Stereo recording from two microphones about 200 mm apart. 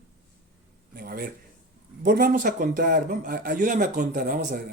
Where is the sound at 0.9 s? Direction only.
45° right (ahead or behind).